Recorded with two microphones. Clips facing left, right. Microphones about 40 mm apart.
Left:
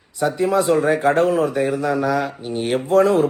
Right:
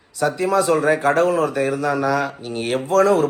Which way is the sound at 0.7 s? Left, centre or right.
Right.